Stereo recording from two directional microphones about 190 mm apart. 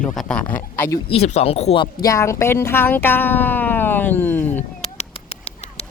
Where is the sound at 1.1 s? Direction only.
35° left (ahead or behind).